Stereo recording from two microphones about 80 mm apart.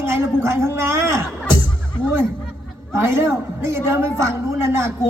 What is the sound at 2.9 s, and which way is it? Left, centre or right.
Speech, right.